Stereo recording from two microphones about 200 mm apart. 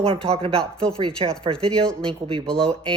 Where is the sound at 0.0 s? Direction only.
30° right (ahead or behind).